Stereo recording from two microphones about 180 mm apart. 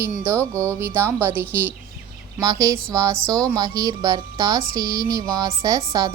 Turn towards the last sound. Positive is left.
turn(degrees=-20)  # may be behind; listen again after turning